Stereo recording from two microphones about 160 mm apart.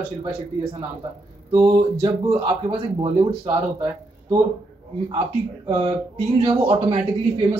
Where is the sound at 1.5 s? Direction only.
25° right (ahead or behind).